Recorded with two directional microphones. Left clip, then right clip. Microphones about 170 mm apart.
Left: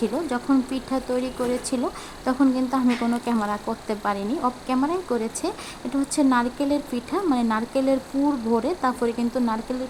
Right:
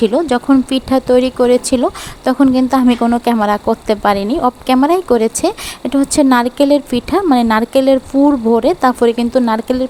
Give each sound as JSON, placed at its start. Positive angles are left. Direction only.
{"t": 0.0, "sound": "speech", "side_deg": -45}